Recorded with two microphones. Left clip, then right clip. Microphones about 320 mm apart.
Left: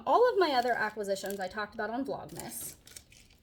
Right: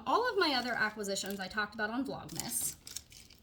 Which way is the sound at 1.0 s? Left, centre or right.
Left.